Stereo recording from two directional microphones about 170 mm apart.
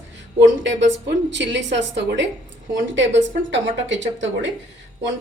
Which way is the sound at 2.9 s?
90° right.